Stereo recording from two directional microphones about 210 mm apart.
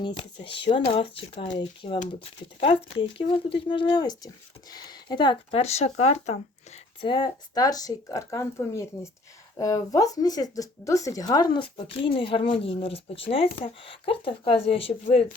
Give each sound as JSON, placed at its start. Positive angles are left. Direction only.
{"t": 0.0, "sound": "speech", "side_deg": 25}